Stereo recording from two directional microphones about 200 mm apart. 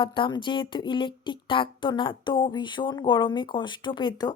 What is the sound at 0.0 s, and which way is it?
Speech, 25° left (ahead or behind).